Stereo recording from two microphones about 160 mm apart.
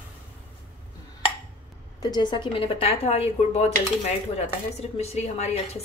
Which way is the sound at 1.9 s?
25° left (ahead or behind).